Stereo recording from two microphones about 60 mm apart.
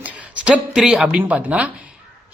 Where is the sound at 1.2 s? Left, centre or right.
Right.